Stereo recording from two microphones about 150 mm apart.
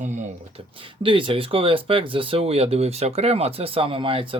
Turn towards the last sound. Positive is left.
turn(degrees=-35)  # may be behind; listen again after turning